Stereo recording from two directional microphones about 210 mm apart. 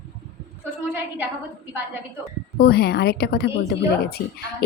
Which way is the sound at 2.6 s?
50° left (ahead or behind).